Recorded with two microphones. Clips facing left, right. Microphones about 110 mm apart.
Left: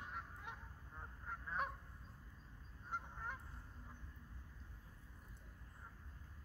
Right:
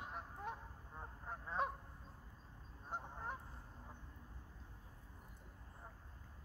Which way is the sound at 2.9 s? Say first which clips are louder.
Right 1 dB; 35° right (ahead or behind).